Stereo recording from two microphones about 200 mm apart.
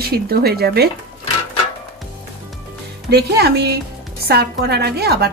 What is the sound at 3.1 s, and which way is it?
Speech, 55° right (ahead or behind).